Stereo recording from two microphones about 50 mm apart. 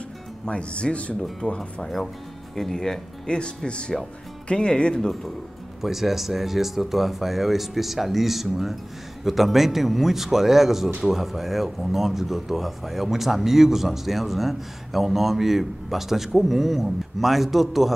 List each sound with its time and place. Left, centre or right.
0.5 s speech: left
1.6 s speech: centre
3.3 s speech: centre
5.8 s speech: centre